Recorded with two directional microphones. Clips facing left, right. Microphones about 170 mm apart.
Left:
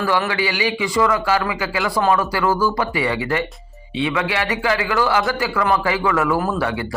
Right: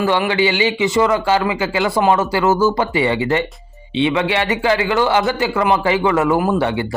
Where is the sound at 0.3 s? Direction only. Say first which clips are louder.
Right 5 dB; 25° right (ahead or behind).